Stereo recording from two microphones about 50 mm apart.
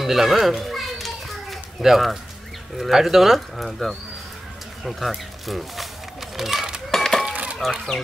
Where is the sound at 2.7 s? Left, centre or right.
Centre.